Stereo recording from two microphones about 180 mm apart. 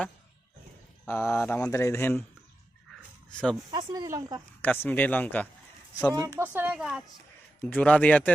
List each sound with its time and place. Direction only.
1.0 s speech: 15° left (ahead or behind)
3.3 s speech: 5° left (ahead or behind)
3.7 s speech: 20° right (ahead or behind)
4.6 s speech: 10° left (ahead or behind)
6.1 s speech: 15° right (ahead or behind)
7.6 s speech: 5° left (ahead or behind)